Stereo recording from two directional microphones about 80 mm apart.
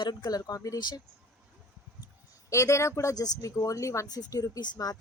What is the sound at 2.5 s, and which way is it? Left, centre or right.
A woman's voice, left.